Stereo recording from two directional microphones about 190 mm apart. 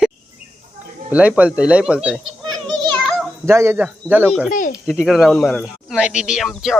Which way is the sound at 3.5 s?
15° right (ahead or behind).